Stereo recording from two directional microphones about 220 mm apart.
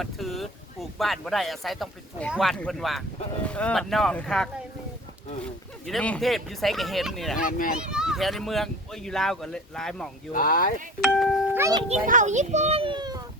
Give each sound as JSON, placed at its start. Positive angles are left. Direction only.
{"t": 0.0, "sound": "speech", "side_deg": 0}
{"t": 5.8, "sound": "speech", "side_deg": 5}
{"t": 10.3, "sound": "speech", "side_deg": 40}
{"t": 11.0, "sound": "speech", "side_deg": 0}
{"t": 11.6, "sound": "a child's voice", "side_deg": -20}
{"t": 12.0, "sound": "a child's voice", "side_deg": -35}